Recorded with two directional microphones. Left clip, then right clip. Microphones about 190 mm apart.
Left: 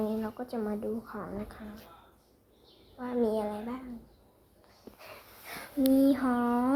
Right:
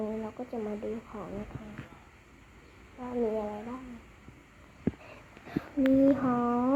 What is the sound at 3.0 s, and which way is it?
Speech, 20° left (ahead or behind).